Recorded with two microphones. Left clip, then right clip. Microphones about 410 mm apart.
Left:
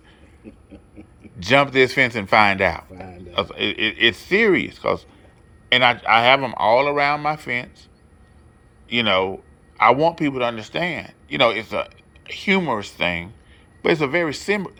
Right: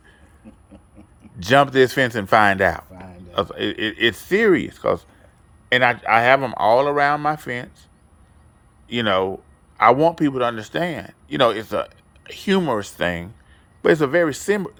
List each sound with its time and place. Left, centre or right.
1.4 s speech: centre
8.9 s speech: centre